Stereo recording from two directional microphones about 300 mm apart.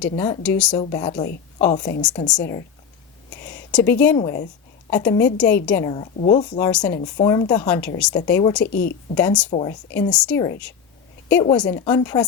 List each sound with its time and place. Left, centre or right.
0.0 s a woman's voice: centre
2.0 s speech: centre
3.7 s a woman's voice: centre
8.6 s speech: left
9.1 s speech: centre
9.5 s a woman's voice: centre
9.9 s a woman's voice: centre